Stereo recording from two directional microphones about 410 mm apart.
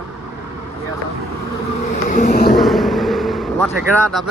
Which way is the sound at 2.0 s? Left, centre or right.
Left.